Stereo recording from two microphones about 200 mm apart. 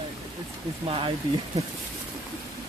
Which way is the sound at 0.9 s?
25° right (ahead or behind).